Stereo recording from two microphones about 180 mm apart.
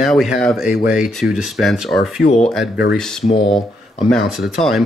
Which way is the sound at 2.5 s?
5° right (ahead or behind).